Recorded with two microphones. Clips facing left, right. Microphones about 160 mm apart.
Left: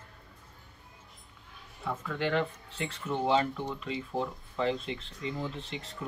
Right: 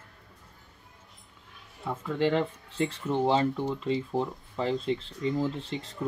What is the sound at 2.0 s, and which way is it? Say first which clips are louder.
Speech: right 5 dB; 30° right (ahead or behind).